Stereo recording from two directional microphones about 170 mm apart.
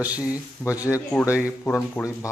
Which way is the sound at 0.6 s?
10° right (ahead or behind).